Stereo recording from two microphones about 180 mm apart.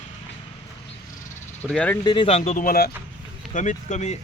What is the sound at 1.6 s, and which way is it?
Speech, 5° left (ahead or behind).